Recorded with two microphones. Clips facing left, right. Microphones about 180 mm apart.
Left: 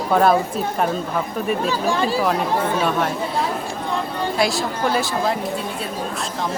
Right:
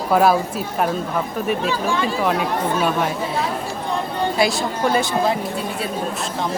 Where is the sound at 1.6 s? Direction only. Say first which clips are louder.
Left 1 dB; 35° left (ahead or behind).